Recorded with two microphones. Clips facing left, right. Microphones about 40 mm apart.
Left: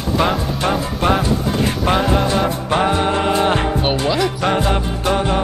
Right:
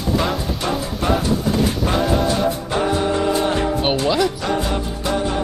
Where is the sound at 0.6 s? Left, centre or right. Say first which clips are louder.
Left 4 dB; left.